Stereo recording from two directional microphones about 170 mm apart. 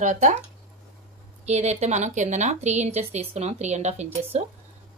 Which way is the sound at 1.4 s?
40° right (ahead or behind).